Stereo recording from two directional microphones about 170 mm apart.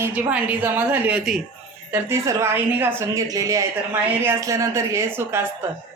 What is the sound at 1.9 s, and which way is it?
Cutlery, 15° right (ahead or behind).